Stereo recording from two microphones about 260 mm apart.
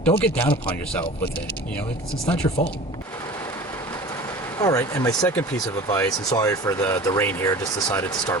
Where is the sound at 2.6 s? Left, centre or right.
Left.